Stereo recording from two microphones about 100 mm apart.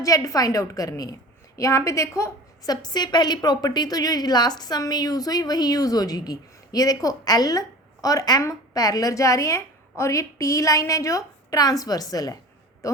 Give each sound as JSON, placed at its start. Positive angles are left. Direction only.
{"t": 0.0, "sound": "a woman's voice", "side_deg": 35}
{"t": 2.8, "sound": "a woman's voice", "side_deg": 45}